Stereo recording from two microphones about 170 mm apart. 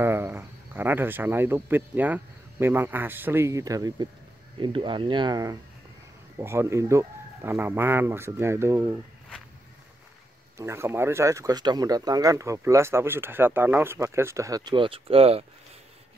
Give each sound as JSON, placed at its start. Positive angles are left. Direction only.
{"t": 0.0, "sound": "speech", "side_deg": -15}
{"t": 10.6, "sound": "speech", "side_deg": -15}